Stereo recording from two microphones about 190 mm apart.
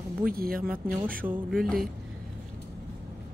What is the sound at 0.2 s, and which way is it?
Speech, 50° right (ahead or behind).